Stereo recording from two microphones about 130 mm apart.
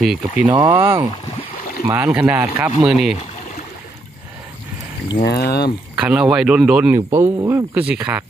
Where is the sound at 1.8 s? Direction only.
15° right (ahead or behind).